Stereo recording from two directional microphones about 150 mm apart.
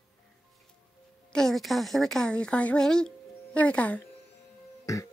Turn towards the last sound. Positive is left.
turn(degrees=20)  # may be behind; listen again after turning